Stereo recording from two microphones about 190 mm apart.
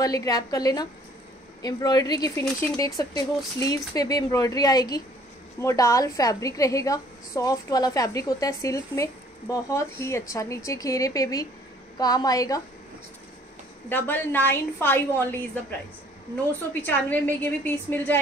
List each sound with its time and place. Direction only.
0.0 s a woman's voice: 20° left (ahead or behind)
13.8 s a woman's voice: 10° left (ahead or behind)
16.8 s a woman's voice: 10° left (ahead or behind)